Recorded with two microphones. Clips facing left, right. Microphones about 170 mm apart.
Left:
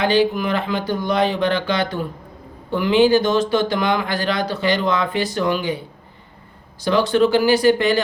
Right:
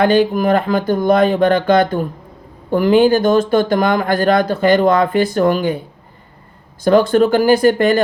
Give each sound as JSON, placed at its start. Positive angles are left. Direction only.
{"t": 0.0, "sound": "speech", "side_deg": -50}
{"t": 6.8, "sound": "speech", "side_deg": -50}